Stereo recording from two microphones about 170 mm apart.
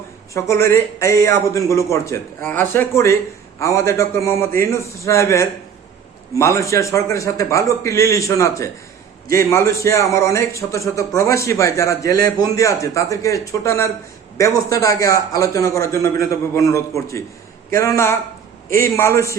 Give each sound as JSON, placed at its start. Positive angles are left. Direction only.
{"t": 0.3, "sound": "a man's voice", "side_deg": 15}